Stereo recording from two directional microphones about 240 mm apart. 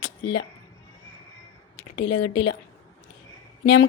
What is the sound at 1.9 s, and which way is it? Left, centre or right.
Speech, left.